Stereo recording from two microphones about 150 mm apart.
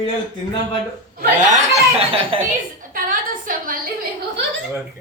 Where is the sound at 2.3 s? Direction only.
35° right (ahead or behind).